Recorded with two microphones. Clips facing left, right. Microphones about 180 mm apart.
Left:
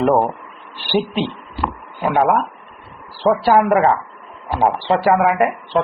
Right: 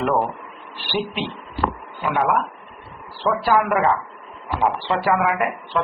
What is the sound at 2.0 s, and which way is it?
A man's voice, 30° left (ahead or behind).